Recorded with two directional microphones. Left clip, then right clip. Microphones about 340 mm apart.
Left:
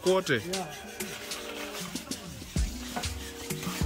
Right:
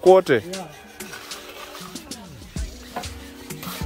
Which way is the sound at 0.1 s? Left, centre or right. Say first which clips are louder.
Right 12 dB; centre.